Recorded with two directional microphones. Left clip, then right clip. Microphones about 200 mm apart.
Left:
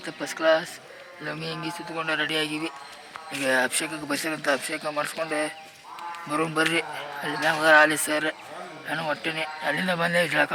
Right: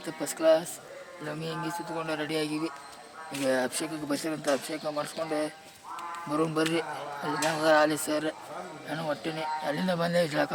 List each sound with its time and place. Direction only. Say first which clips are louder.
0.0 s speech: left 2 dB; centre (ahead or behind)
1.2 s a man's voice: left 3 dB; 25° left (ahead or behind)
2.0 s speech: left 7 dB; centre (ahead or behind)